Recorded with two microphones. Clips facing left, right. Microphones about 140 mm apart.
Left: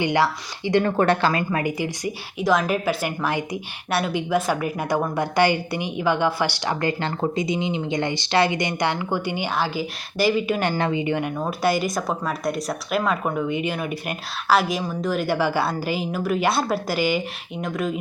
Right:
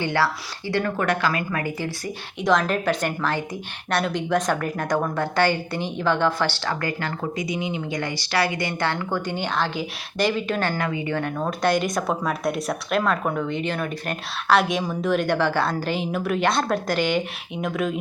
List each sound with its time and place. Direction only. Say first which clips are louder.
0.0 s a woman's voice: left 2 dB; 15° left (ahead or behind)
2.4 s a woman's voice: even; 5° left (ahead or behind)
13.0 s a woman's voice: left 1 dB; 10° left (ahead or behind)